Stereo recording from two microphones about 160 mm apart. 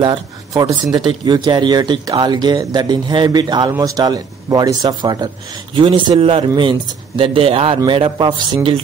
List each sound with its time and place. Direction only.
0.0 s speech: 30° right (ahead or behind)